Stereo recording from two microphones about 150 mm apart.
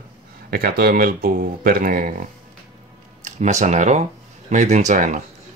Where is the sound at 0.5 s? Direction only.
90° right; by 2.2 s 70° right (ahead or behind).